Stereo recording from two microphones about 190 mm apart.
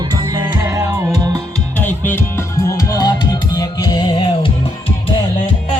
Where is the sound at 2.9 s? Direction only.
20° left (ahead or behind).